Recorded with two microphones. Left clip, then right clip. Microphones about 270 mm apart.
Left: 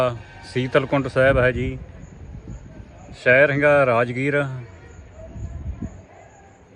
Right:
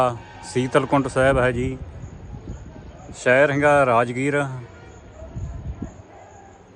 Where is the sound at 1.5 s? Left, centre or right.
Right.